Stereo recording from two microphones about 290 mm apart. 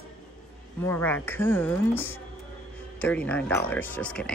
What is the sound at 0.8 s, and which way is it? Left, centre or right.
Speech, centre.